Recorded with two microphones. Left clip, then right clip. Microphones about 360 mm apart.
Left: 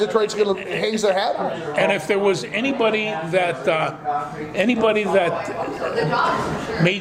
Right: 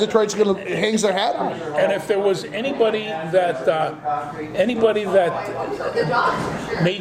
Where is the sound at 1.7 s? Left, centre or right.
Left.